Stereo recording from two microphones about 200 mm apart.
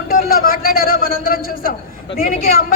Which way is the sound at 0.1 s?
45° left (ahead or behind).